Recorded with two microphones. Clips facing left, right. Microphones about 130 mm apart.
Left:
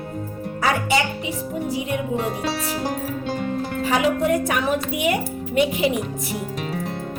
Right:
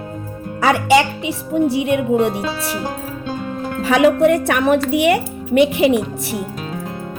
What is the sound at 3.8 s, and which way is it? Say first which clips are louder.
Speech: right 8 dB; 75° right (ahead or behind).